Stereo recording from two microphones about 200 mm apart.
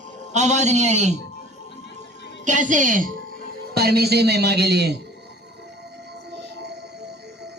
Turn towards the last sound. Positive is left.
turn(degrees=-55)  # may be behind; listen again after turning